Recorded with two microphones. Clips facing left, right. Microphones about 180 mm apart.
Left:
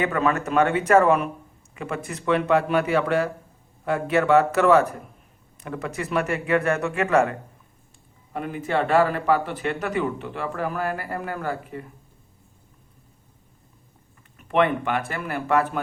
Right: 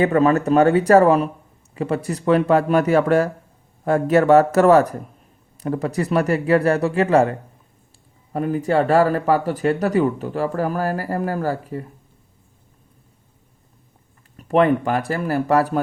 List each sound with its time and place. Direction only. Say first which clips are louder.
0.0 s speech: right 7 dB; 35° right (ahead or behind)
14.3 s speech: right 5 dB; 40° right (ahead or behind)